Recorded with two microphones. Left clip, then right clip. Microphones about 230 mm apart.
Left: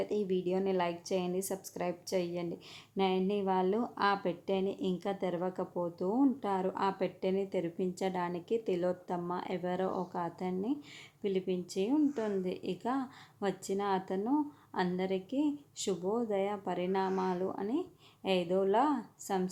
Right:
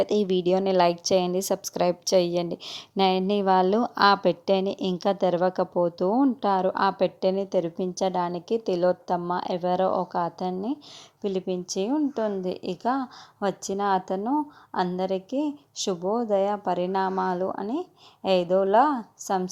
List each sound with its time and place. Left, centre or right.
0.0 s a woman's voice: right